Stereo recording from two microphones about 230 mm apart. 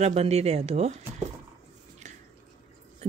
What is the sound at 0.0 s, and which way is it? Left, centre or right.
Speech, right.